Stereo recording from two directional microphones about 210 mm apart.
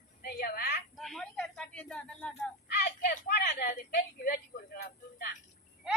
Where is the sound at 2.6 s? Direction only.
50° left (ahead or behind).